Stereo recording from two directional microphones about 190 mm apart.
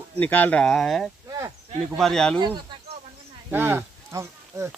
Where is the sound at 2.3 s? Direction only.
25° right (ahead or behind).